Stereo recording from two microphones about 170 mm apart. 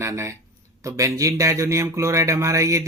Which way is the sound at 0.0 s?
15° right (ahead or behind).